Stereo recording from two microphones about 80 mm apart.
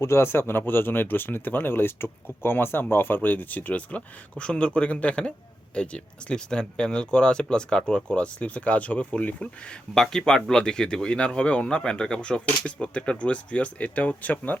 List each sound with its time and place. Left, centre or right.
0.0 s speech: left